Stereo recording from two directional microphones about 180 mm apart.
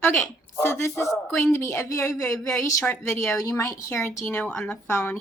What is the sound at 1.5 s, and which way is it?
A woman's voice, 15° left (ahead or behind).